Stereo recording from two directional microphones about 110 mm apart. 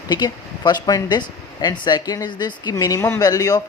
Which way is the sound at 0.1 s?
40° left (ahead or behind).